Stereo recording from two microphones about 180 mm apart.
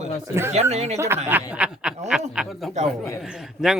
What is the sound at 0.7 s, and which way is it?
Speech, 40° right (ahead or behind).